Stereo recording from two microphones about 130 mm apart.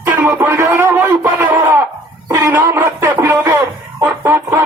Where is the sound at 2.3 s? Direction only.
15° right (ahead or behind).